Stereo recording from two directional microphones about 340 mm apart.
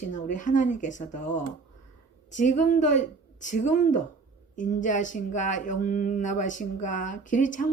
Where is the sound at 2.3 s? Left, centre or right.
Left.